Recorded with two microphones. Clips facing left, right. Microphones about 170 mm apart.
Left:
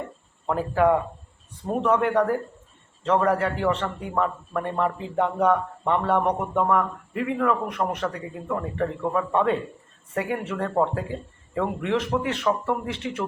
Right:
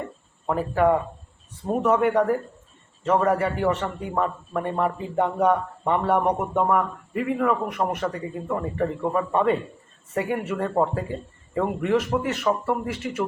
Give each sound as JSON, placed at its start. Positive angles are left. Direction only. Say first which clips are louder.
{"t": 0.4, "sound": "a man's voice", "louder": "even", "side_deg": -5}
{"t": 6.7, "sound": "a man's voice", "louder": "even", "side_deg": -5}